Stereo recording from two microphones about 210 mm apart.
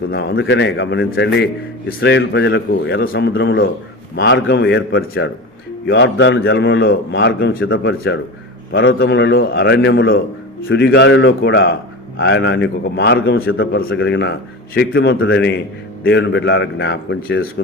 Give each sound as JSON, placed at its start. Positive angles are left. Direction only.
{"t": 0.1, "sound": "a man's voice", "side_deg": 55}
{"t": 13.6, "sound": "a man's voice", "side_deg": 55}